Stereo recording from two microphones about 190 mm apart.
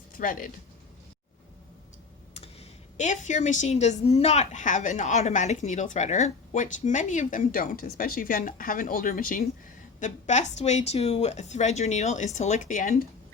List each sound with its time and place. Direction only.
0.1 s speech: 45° left (ahead or behind)
2.3 s speech: 35° left (ahead or behind); by 9.5 s 50° left (ahead or behind)
10.0 s speech: 40° left (ahead or behind)